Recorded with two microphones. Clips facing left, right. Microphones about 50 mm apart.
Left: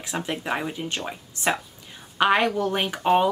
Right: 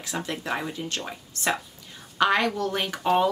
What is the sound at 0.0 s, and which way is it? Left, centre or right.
Speech, centre.